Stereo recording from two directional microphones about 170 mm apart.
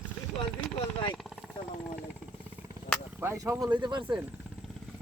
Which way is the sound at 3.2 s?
20° right (ahead or behind).